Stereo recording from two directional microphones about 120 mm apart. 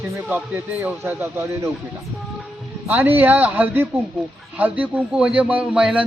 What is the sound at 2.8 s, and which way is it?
A man's voice, 15° right (ahead or behind).